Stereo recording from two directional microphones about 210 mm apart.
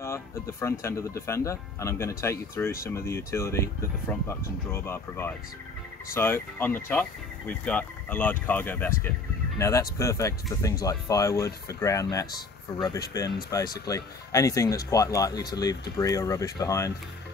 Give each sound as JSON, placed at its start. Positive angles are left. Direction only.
{"t": 0.0, "sound": "speech", "side_deg": 15}